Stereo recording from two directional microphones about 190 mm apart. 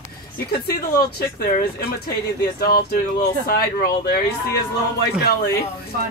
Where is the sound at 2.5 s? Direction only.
55° left (ahead or behind).